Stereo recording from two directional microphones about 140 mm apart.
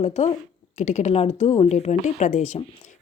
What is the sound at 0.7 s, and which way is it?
Speech, 60° left (ahead or behind).